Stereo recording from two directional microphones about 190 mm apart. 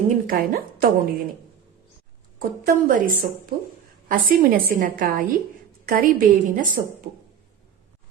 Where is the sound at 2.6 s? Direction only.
45° right (ahead or behind).